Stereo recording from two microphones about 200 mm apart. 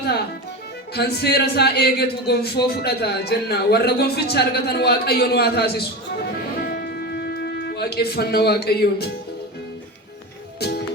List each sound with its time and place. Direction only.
0.9 s a man's voice: 55° left (ahead or behind)
6.7 s music: 50° left (ahead or behind)
7.7 s a man's voice: 55° left (ahead or behind)